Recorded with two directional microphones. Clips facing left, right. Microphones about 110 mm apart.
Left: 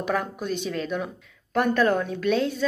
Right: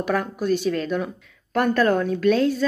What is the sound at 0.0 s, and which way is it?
Speech, 15° left (ahead or behind).